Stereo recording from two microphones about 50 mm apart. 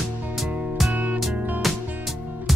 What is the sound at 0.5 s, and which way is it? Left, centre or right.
Music, right.